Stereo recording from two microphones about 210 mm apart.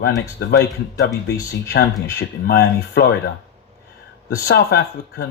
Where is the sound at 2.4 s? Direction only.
50° left (ahead or behind).